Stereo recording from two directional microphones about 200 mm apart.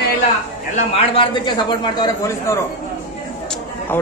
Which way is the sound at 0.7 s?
25° left (ahead or behind).